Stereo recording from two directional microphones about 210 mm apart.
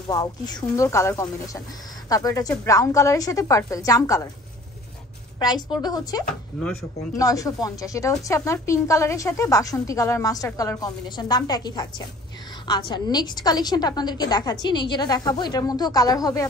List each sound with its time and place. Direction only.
0.1 s a woman's voice: 20° left (ahead or behind)
5.4 s a woman's voice: 20° left (ahead or behind)
6.5 s speech: centre (ahead or behind)
7.2 s a woman's voice: 15° left (ahead or behind)